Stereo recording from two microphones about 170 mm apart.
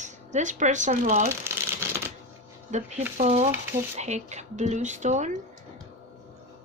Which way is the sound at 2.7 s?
45° right (ahead or behind).